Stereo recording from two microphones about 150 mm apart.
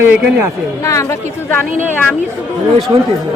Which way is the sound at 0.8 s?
20° left (ahead or behind).